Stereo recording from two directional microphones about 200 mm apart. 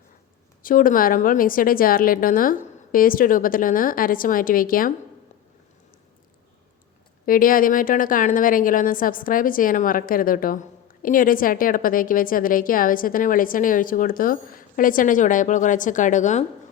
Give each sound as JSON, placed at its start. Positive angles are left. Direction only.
{"t": 0.6, "sound": "a woman's voice", "side_deg": 45}
{"t": 7.3, "sound": "a woman's voice", "side_deg": 45}